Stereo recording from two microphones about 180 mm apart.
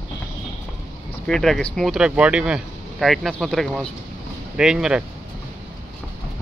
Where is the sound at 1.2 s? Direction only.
Centre (ahead or behind).